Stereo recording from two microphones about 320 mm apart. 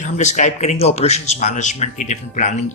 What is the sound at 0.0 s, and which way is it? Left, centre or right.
Speech, left.